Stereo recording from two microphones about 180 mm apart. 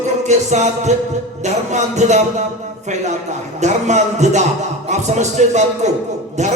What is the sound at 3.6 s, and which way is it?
A man's voice, 40° right (ahead or behind).